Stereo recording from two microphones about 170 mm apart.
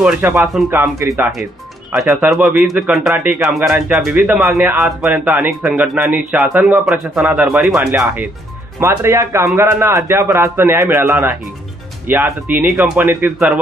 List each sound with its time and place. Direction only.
0.0 s speech: 10° right (ahead or behind)
1.9 s speech: centre (ahead or behind)